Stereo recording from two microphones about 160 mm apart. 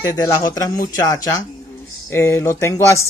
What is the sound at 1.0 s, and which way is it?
Speech, 20° left (ahead or behind).